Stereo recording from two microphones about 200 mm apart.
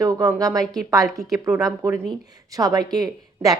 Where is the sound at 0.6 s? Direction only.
Centre (ahead or behind).